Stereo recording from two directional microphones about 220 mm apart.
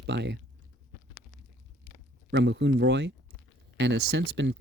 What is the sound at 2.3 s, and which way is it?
Speech, 50° right (ahead or behind).